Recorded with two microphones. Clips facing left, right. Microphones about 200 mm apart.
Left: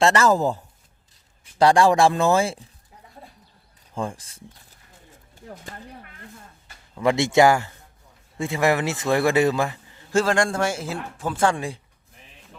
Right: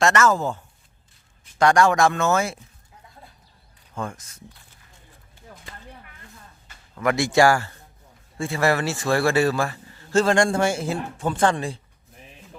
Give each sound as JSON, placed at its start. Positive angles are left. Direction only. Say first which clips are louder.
{"t": 0.0, "sound": "speech", "louder": "left 1 dB", "side_deg": 30}
{"t": 3.9, "sound": "speech", "louder": "left 2 dB", "side_deg": 30}
{"t": 7.0, "sound": "a man's voice", "louder": "left 1 dB", "side_deg": 25}